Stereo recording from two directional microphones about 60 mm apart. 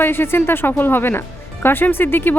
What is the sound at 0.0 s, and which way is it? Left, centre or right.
Speech, left.